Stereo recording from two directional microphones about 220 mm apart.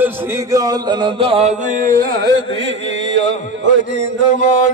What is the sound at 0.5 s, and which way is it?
Music, 15° right (ahead or behind).